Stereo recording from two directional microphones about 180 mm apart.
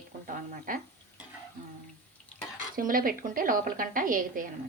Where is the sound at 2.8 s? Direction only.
50° right (ahead or behind).